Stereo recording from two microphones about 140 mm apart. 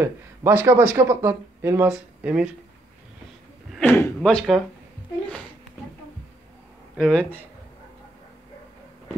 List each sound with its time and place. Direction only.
0.0 s speech: 15° right (ahead or behind)
3.8 s speech: 20° left (ahead or behind)
4.2 s speech: 5° left (ahead or behind)
7.0 s speech: 5° left (ahead or behind)